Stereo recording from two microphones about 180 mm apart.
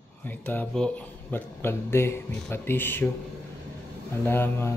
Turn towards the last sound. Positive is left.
turn(degrees=10)  # may be behind; listen again after turning